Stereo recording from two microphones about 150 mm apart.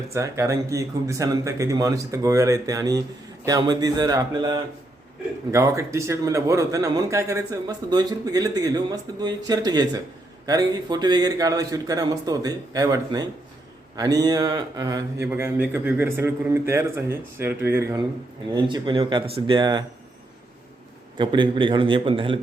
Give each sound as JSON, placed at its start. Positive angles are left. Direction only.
{"t": 0.1, "sound": "a man's voice", "side_deg": -20}
{"t": 18.5, "sound": "speech", "side_deg": -30}
{"t": 21.2, "sound": "speech", "side_deg": -30}